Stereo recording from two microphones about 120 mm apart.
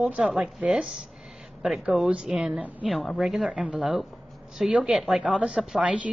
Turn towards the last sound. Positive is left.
turn(degrees=-5)  # may be behind; listen again after turning